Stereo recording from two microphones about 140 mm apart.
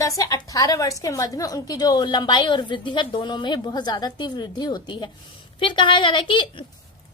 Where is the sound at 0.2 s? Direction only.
25° left (ahead or behind).